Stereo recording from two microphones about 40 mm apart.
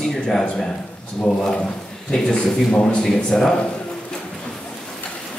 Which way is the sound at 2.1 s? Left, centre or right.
Left.